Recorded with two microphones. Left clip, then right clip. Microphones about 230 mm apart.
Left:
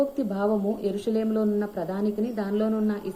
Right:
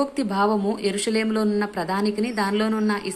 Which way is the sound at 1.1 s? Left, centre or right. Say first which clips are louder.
Right 3 dB; right.